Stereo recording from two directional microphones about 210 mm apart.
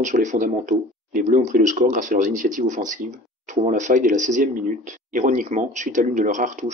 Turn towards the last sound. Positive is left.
turn(degrees=-35)  # may be behind; listen again after turning